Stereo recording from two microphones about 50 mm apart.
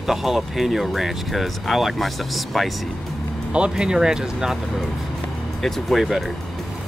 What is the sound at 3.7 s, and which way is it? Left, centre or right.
Speech, centre.